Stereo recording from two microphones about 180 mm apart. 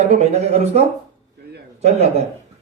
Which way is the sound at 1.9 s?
35° right (ahead or behind).